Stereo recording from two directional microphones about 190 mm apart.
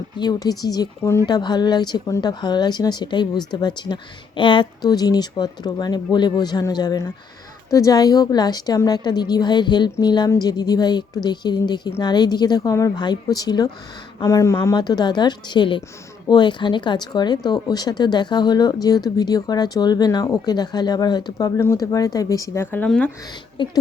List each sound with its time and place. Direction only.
0.2 s speech: 20° left (ahead or behind)
23.6 s speech: 25° left (ahead or behind)